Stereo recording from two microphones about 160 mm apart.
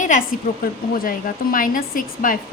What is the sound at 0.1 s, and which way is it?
Speech, 55° left (ahead or behind).